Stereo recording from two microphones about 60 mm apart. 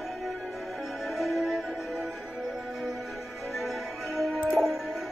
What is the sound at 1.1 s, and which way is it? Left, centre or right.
Music, centre.